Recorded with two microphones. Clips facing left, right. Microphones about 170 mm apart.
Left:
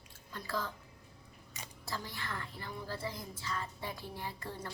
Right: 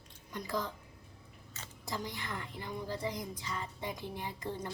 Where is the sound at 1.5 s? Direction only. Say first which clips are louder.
Left 1 dB; 15° left (ahead or behind).